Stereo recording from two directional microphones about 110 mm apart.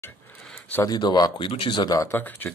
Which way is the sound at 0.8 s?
40° left (ahead or behind).